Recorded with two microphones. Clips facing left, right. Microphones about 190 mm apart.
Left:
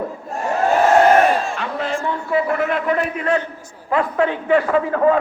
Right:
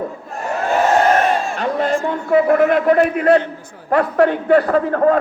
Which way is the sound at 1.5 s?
40° right (ahead or behind).